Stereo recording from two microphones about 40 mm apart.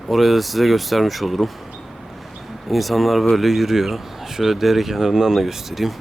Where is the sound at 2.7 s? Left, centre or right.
Centre.